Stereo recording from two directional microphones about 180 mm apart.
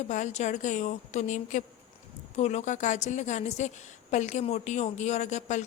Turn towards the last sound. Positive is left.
turn(degrees=40)  # may be behind; listen again after turning